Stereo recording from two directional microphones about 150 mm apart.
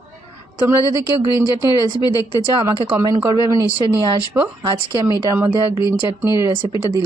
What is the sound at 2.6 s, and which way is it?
Speech, 20° right (ahead or behind).